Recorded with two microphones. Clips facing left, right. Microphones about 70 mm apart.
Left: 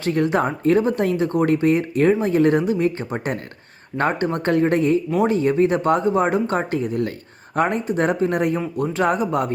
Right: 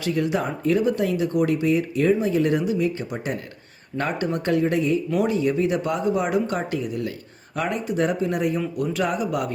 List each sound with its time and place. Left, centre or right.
0.0 s speech: left